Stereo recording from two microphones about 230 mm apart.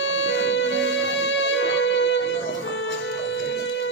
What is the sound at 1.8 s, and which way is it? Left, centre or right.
Music, left.